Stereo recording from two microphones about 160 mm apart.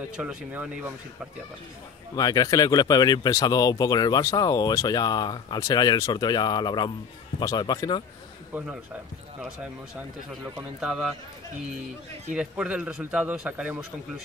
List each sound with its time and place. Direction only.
0.2 s a man's voice: 10° right (ahead or behind)
2.1 s speech: 25° left (ahead or behind)
8.5 s a man's voice: 10° right (ahead or behind)
10.8 s speech: 5° right (ahead or behind)
12.4 s a man's voice: 5° right (ahead or behind)